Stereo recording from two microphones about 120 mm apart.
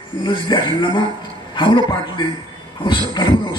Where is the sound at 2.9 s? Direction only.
40° left (ahead or behind).